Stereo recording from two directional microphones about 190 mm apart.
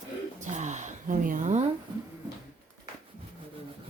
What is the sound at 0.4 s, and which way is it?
Speech, 40° right (ahead or behind).